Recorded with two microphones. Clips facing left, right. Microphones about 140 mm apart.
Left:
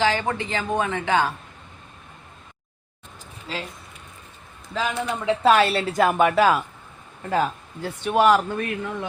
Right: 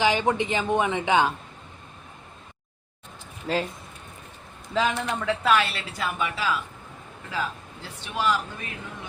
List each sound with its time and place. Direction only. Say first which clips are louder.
0.0 s speech: even; 20° right (ahead or behind)
4.7 s speech: right 2 dB; centre (ahead or behind)
5.2 s speech: left 6 dB; 30° left (ahead or behind); by 9.0 s 60° left (ahead or behind)